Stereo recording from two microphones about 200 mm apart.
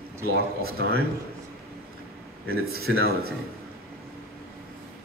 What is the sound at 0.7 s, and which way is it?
Speech, 50° right (ahead or behind).